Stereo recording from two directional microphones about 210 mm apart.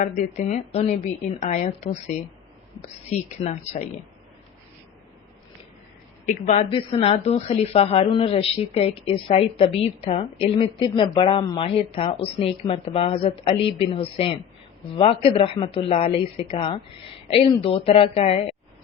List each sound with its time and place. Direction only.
0.0 s a woman's voice: 35° left (ahead or behind)
6.2 s speech: 30° left (ahead or behind)